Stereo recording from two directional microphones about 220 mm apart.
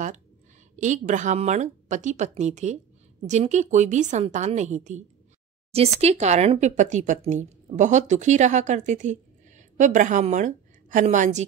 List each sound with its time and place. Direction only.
0.7 s speech: 35° right (ahead or behind)